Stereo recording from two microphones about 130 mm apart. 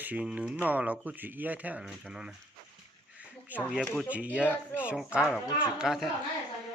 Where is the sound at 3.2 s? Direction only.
10° right (ahead or behind).